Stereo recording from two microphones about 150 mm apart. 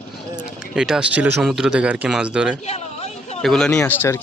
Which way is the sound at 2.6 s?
45° left (ahead or behind).